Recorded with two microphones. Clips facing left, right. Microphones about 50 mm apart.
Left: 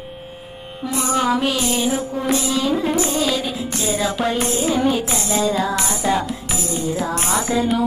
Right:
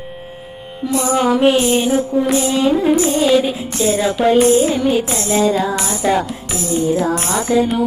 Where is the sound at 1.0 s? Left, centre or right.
Right.